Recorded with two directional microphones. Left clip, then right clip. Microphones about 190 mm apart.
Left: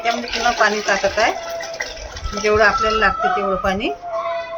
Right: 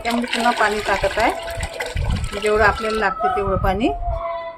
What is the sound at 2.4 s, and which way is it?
Speech, 40° right (ahead or behind).